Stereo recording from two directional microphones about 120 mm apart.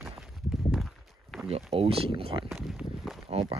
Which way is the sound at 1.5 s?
55° right (ahead or behind).